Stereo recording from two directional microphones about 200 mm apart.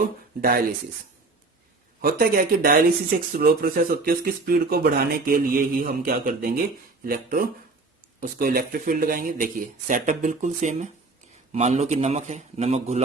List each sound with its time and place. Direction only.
2.0 s a man's voice: 45° right (ahead or behind)